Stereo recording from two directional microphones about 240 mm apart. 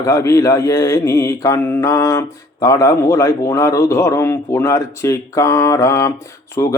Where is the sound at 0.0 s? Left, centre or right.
Centre.